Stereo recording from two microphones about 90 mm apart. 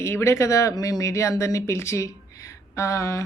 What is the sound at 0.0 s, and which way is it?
Speech, 30° left (ahead or behind).